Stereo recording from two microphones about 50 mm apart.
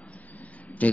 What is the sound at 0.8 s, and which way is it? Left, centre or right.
Speech, left.